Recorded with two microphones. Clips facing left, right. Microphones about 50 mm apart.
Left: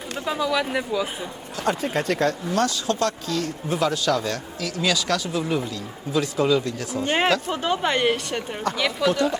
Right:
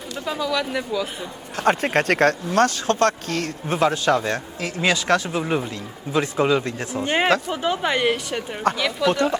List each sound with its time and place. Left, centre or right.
0.3 s speech: centre
1.5 s speech: right
7.5 s a woman's voice: centre
8.7 s speech: right